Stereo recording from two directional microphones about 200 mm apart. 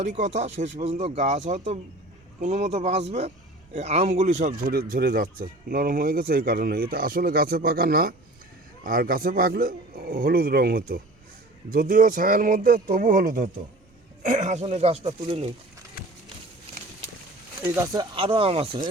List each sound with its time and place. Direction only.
0.0 s a man's voice: 35° right (ahead or behind)
17.9 s speech: 25° right (ahead or behind)